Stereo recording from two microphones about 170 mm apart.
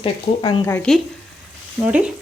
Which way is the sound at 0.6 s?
15° left (ahead or behind).